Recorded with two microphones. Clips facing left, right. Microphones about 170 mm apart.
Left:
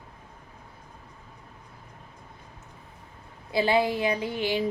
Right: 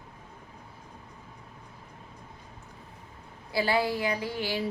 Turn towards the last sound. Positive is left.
turn(degrees=20)  # may be behind; listen again after turning